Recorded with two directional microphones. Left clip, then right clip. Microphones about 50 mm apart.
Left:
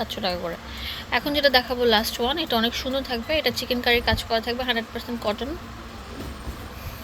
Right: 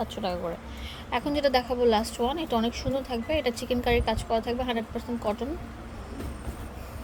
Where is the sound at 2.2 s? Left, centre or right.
Centre.